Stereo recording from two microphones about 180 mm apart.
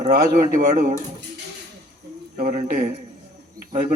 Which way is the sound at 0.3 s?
55° right (ahead or behind).